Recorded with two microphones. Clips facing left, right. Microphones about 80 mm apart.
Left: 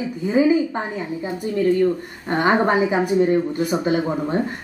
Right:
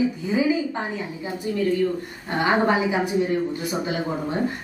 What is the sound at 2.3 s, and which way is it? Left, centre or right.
Speech, left.